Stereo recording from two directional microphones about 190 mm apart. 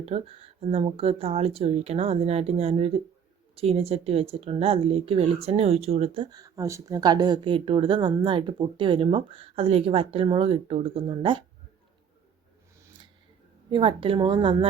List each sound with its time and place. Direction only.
0.0 s speech: 30° right (ahead or behind)
6.3 s a woman's voice: 15° right (ahead or behind)
13.7 s a woman's voice: 25° right (ahead or behind)